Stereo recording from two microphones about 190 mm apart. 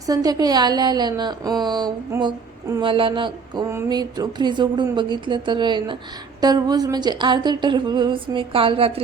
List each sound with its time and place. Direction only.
0.0 s a woman's voice: 20° right (ahead or behind)